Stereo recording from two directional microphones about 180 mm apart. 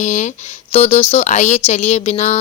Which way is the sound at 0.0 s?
40° left (ahead or behind).